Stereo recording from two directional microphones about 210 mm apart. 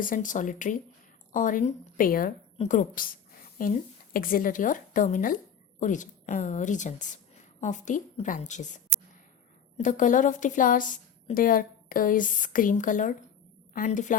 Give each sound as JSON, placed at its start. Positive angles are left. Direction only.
{"t": 0.0, "sound": "a woman's voice", "side_deg": 40}